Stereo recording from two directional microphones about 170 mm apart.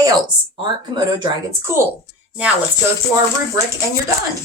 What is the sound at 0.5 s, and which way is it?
Speech, 30° right (ahead or behind).